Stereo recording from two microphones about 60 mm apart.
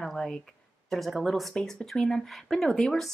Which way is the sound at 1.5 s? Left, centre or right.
Centre.